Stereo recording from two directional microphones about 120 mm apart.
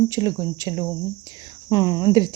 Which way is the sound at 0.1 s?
30° right (ahead or behind).